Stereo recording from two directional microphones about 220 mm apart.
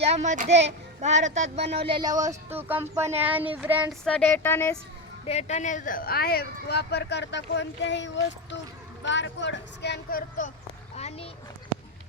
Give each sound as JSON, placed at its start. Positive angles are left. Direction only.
{"t": 0.0, "sound": "child singing", "side_deg": -30}
{"t": 0.6, "sound": "a child's voice", "side_deg": -30}
{"t": 2.2, "sound": "speech", "side_deg": -10}
{"t": 4.0, "sound": "speech", "side_deg": 5}
{"t": 5.2, "sound": "speech", "side_deg": 30}
{"t": 10.9, "sound": "a sound", "side_deg": 30}